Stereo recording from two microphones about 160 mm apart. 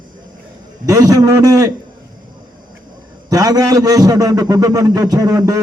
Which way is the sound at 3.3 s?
25° right (ahead or behind).